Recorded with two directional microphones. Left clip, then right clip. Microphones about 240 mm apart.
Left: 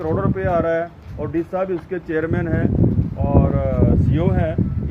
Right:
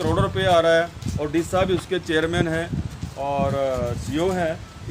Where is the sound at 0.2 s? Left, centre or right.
Centre.